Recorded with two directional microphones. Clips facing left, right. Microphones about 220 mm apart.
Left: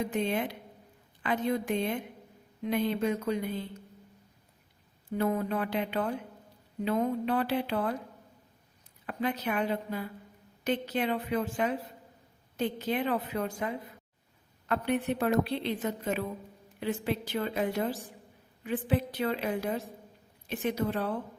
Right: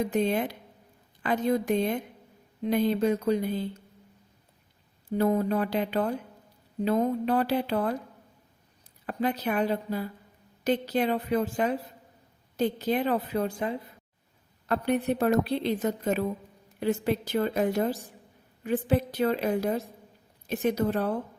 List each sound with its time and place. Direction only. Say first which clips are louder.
0.1 s a woman's voice: right 4 dB; 40° right (ahead or behind)
5.1 s a woman's voice: right 5 dB; 35° right (ahead or behind)
9.0 s a woman's voice: right 3 dB; 35° right (ahead or behind)